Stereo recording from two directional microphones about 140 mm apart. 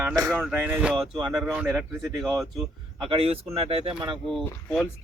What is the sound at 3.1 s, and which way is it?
Speech, 45° right (ahead or behind).